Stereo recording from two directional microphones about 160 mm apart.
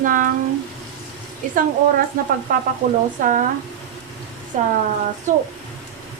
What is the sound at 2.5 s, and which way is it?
Speech, 60° right (ahead or behind).